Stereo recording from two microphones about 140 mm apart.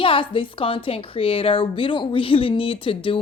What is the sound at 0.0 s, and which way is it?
A woman's voice, 40° left (ahead or behind).